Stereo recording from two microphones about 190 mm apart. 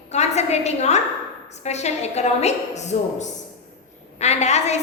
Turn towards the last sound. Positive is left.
turn(degrees=35)  # may be behind; listen again after turning